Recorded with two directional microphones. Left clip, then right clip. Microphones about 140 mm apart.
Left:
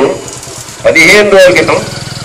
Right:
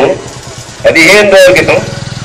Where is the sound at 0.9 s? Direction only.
45° left (ahead or behind).